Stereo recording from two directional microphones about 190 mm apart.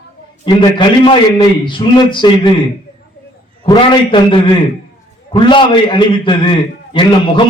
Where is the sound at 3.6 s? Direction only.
25° left (ahead or behind).